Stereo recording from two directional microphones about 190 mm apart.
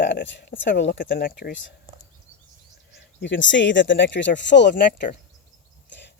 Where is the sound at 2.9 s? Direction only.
70° left (ahead or behind).